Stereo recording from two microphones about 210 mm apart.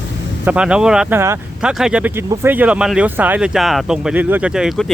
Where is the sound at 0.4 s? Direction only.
5° right (ahead or behind).